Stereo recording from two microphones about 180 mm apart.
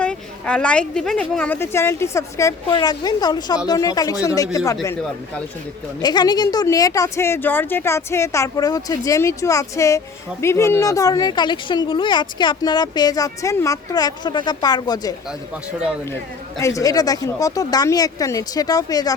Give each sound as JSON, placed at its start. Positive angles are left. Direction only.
{"t": 0.0, "sound": "a woman's voice", "side_deg": 5}
{"t": 6.0, "sound": "a woman's voice", "side_deg": 25}
{"t": 16.6, "sound": "speech", "side_deg": 15}